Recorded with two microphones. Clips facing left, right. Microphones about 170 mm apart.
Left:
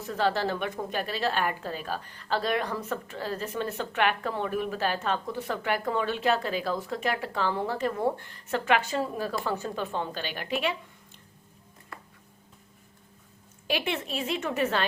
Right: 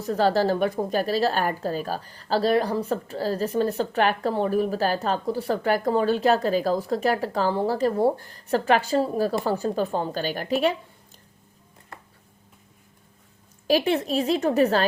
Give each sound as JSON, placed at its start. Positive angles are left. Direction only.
{"t": 0.0, "sound": "a woman's voice", "side_deg": -40}
{"t": 13.7, "sound": "a woman's voice", "side_deg": -40}